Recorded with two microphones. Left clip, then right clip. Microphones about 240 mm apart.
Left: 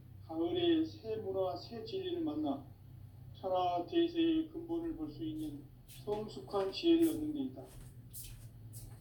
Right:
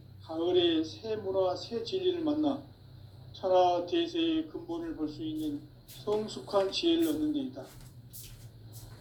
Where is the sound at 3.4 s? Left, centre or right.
Right.